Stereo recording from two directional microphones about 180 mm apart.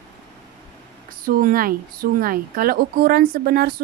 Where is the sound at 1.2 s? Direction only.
55° right (ahead or behind).